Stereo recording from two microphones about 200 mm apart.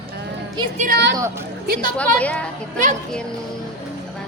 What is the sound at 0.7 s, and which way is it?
Speech, 40° right (ahead or behind).